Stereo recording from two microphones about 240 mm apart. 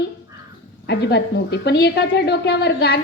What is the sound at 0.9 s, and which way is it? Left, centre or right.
A woman's voice, left.